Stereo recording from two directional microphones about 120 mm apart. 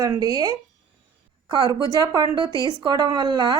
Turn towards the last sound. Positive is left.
turn(degrees=-35)  # may be behind; listen again after turning